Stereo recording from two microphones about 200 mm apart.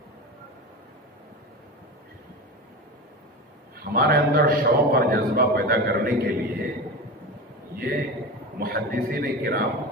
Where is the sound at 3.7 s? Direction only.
50° right (ahead or behind).